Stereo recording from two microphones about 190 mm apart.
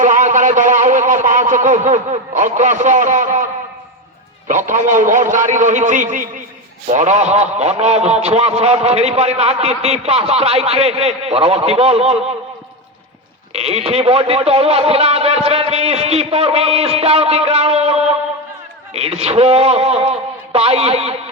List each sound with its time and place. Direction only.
0.0 s a man's voice: 40° right (ahead or behind)
4.4 s a man's voice: 40° right (ahead or behind)
13.5 s a man's voice: 35° right (ahead or behind)